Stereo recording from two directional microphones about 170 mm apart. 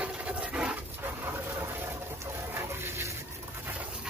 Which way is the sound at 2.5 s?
15° right (ahead or behind).